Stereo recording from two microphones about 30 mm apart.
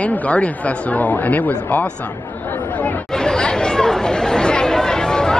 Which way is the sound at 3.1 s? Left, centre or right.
Left.